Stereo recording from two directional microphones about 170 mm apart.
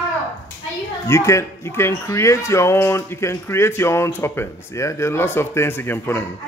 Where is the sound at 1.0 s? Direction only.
15° left (ahead or behind).